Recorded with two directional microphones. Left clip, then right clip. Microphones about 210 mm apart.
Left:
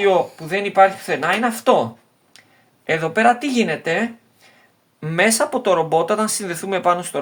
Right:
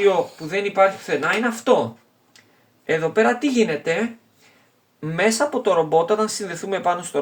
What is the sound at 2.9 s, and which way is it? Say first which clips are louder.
Speech: left 2 dB; 40° left (ahead or behind).